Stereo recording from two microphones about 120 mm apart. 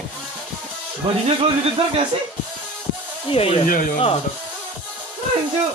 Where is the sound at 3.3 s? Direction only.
55° left (ahead or behind).